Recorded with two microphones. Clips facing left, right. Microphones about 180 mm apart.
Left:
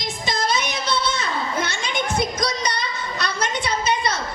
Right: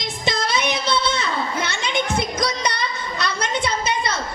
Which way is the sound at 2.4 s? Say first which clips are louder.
Right 1 dB; 55° right (ahead or behind).